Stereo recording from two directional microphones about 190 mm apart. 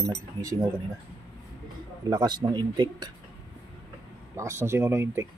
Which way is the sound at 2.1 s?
20° right (ahead or behind).